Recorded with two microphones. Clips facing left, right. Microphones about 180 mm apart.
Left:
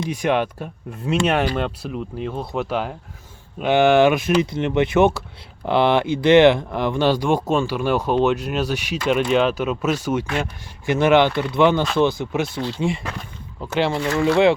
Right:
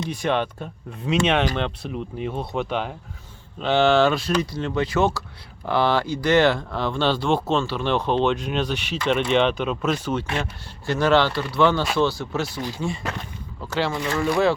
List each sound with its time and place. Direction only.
0.0 s speech: 10° left (ahead or behind)
13.7 s speech: 20° left (ahead or behind)